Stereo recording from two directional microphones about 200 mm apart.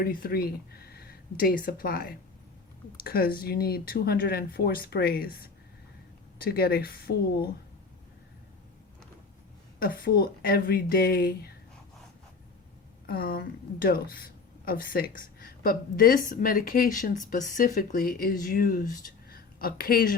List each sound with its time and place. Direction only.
0.0 s speech: 45° left (ahead or behind)
10.0 s speech: 50° left (ahead or behind)
13.1 s speech: 45° left (ahead or behind)